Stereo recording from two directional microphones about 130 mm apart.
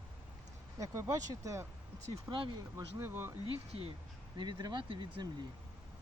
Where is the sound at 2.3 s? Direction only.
40° right (ahead or behind).